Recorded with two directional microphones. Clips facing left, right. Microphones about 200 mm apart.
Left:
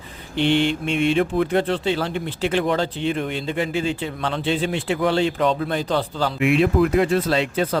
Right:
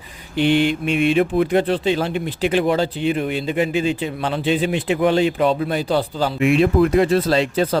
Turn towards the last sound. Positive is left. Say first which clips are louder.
# right 3 dB
turn(degrees=-35)  # may be behind; listen again after turning